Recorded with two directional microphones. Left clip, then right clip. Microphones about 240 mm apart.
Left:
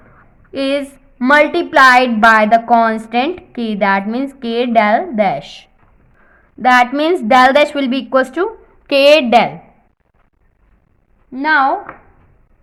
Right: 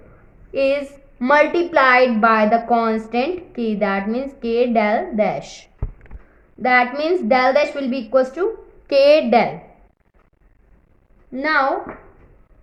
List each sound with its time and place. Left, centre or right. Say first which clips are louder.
0.5 s a woman's voice: left 1 dB; left
6.6 s a woman's voice: left 5 dB; left
11.3 s a woman's voice: left 5 dB; left